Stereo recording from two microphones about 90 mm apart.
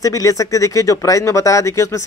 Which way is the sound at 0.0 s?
40° left (ahead or behind).